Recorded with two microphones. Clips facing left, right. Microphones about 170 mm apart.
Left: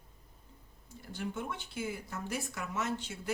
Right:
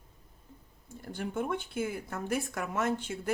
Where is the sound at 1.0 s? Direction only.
50° right (ahead or behind).